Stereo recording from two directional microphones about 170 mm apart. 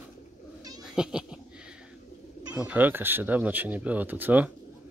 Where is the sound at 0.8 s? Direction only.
5° right (ahead or behind).